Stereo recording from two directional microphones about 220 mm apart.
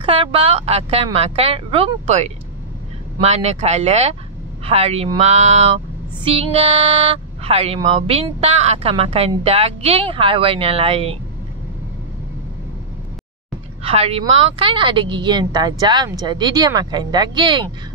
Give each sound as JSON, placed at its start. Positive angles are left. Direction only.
{"t": 0.0, "sound": "speech", "side_deg": -25}
{"t": 13.8, "sound": "speech", "side_deg": -25}